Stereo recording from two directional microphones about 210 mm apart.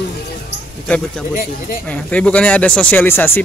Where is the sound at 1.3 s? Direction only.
45° left (ahead or behind).